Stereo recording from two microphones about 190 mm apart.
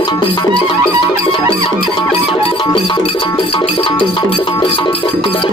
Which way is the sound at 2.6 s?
25° left (ahead or behind).